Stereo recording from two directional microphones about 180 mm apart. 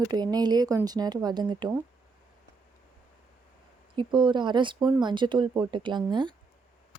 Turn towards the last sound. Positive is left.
turn(degrees=-25)  # may be behind; listen again after turning